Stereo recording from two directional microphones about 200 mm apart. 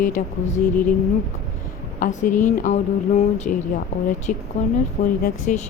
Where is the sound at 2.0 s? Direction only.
40° left (ahead or behind).